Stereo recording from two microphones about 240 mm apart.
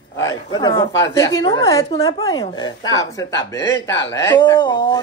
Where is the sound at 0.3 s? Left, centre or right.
Centre.